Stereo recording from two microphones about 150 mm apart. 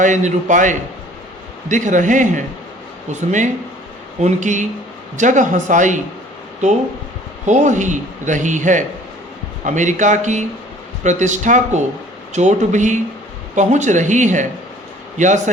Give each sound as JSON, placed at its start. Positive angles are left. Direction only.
{"t": 0.0, "sound": "a man's voice", "side_deg": -55}
{"t": 7.4, "sound": "a man's voice", "side_deg": -55}